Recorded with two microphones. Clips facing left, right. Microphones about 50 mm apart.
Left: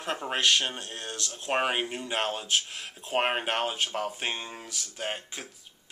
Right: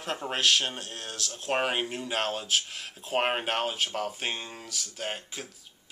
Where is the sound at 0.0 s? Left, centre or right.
Centre.